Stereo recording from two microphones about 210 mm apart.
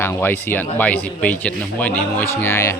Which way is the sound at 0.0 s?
10° left (ahead or behind).